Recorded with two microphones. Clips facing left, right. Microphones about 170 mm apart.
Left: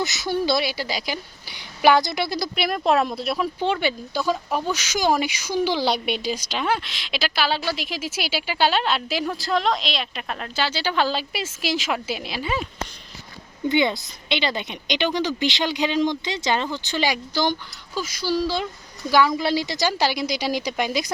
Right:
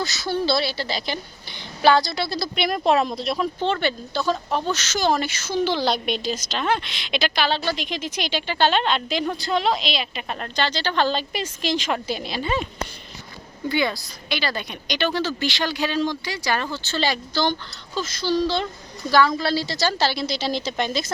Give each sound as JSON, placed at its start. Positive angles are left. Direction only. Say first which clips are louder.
{"t": 0.0, "sound": "a woman's voice", "louder": "left 1 dB", "side_deg": 20}
{"t": 2.6, "sound": "speech", "louder": "right 1 dB", "side_deg": 0}
{"t": 13.7, "sound": "a woman's voice", "louder": "left 3 dB", "side_deg": 20}